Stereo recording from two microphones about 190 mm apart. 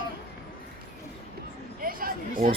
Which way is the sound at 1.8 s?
50° right (ahead or behind).